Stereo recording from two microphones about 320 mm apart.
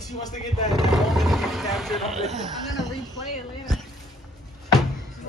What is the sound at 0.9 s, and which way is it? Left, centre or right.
Speech, centre.